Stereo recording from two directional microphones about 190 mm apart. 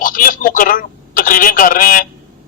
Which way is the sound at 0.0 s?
45° left (ahead or behind).